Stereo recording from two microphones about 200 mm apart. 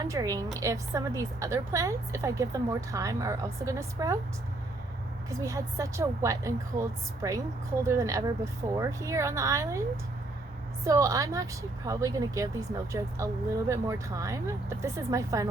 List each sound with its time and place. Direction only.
0.1 s a woman's voice: 15° right (ahead or behind)
5.4 s a woman's voice: 15° right (ahead or behind)
10.8 s a woman's voice: 15° right (ahead or behind)